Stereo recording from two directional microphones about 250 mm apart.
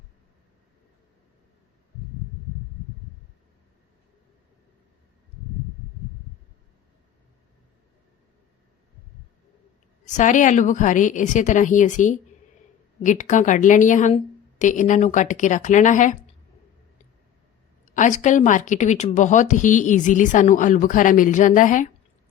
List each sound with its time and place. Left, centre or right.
10.2 s a woman's voice: left
17.8 s speech: left